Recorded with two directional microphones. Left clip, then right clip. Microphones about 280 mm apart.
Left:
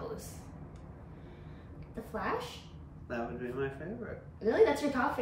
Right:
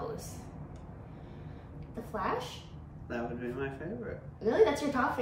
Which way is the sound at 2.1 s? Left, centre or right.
Centre.